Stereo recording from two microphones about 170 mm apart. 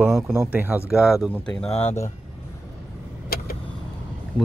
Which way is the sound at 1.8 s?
15° left (ahead or behind).